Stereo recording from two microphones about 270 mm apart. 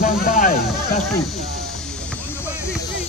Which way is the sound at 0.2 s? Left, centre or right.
Left.